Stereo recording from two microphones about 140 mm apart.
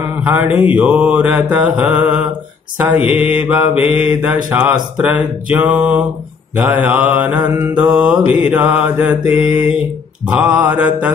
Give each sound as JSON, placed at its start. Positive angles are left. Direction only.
{"t": 0.2, "sound": "mantra", "side_deg": -15}